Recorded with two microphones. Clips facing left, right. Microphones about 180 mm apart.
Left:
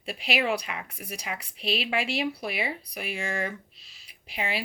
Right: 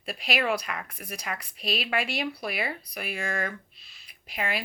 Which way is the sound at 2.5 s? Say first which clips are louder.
Even; centre (ahead or behind).